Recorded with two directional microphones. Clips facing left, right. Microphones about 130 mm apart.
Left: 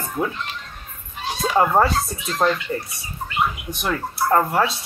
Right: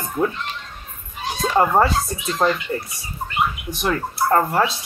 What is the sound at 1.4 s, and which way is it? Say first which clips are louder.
Speech: right 1 dB; centre (ahead or behind).